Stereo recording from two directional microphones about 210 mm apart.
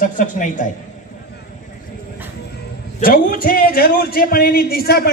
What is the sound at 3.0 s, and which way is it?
A man's voice, 45° left (ahead or behind).